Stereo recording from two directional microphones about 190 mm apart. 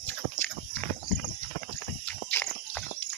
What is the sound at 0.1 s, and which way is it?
Walk, 5° left (ahead or behind).